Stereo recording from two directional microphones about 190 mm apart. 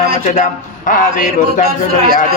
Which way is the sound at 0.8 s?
45° left (ahead or behind).